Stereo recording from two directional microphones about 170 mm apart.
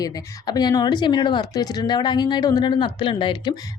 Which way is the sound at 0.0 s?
25° left (ahead or behind).